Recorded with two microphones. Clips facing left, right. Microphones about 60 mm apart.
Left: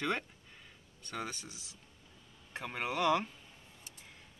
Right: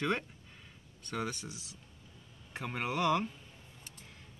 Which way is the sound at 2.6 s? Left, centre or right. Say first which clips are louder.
Right 1 dB; centre.